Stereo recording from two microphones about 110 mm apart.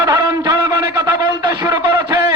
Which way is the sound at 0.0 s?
30° right (ahead or behind).